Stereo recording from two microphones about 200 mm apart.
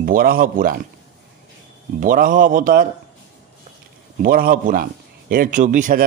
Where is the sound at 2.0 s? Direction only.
45° right (ahead or behind).